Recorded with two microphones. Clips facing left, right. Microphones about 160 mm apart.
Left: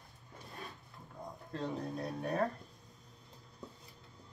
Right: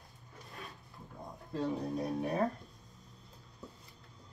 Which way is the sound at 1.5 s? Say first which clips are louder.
Right 4 dB; 5° right (ahead or behind).